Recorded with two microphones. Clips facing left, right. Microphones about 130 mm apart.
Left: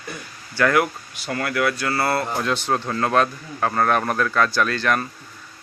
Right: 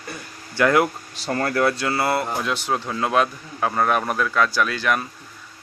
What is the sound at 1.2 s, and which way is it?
Speech, 35° right (ahead or behind).